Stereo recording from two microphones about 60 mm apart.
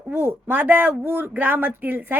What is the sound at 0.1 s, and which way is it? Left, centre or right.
Speech, right.